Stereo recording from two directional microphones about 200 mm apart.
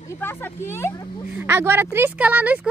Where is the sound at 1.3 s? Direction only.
10° right (ahead or behind).